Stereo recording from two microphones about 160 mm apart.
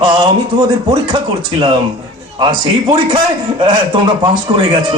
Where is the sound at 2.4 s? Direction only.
30° right (ahead or behind).